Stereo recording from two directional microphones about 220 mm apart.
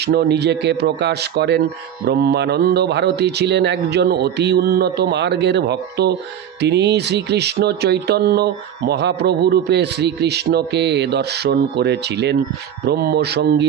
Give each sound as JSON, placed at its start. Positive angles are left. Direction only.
{"t": 0.0, "sound": "speech", "side_deg": -50}